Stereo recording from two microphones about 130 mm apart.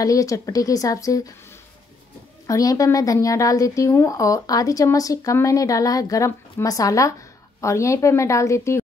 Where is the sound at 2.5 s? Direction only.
25° left (ahead or behind).